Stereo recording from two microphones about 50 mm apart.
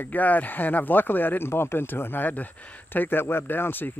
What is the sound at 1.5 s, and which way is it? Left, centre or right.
Speech, left.